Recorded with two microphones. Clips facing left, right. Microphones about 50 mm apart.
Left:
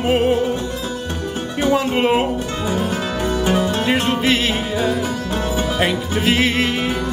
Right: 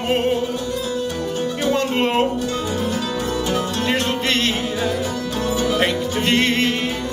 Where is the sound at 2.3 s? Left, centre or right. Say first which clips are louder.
Left 1 dB; left.